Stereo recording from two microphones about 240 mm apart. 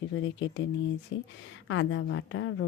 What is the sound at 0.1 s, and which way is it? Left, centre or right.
A woman's voice, left.